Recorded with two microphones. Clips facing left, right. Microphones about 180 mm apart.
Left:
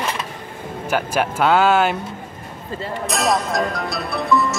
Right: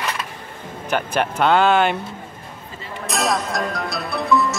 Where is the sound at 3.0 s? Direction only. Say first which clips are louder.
Left 1 dB; centre (ahead or behind).